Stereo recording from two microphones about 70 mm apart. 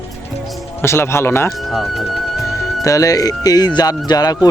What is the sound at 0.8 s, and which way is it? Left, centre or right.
Speech, left.